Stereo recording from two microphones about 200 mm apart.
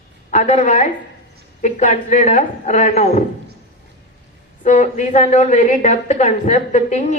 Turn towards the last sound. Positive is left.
turn(degrees=35)  # may be behind; listen again after turning